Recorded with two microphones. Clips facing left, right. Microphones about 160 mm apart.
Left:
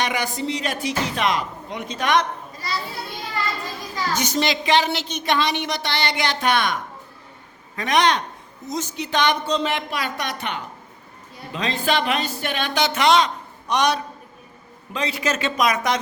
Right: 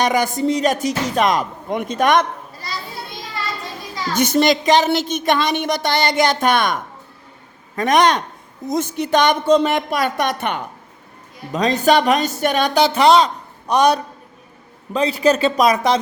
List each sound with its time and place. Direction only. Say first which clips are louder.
0.0 s a woman's voice: right 7 dB; 40° right (ahead or behind)
4.1 s a woman's voice: right 8 dB; 55° right (ahead or behind)
7.8 s a woman's voice: right 4 dB; 45° right (ahead or behind)
11.5 s speech: right 8 dB; 40° right (ahead or behind)